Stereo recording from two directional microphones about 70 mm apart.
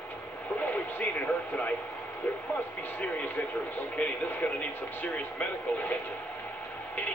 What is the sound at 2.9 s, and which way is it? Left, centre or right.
Speech, left.